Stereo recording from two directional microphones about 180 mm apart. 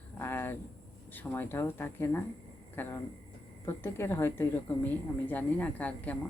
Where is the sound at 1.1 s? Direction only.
10° left (ahead or behind).